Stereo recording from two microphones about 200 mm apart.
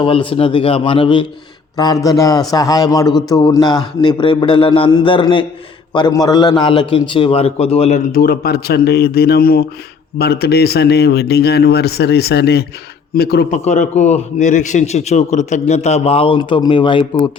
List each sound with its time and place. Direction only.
0.0 s a man's voice: 25° left (ahead or behind); by 13.5 s 50° left (ahead or behind)
13.5 s a man's voice: 35° left (ahead or behind)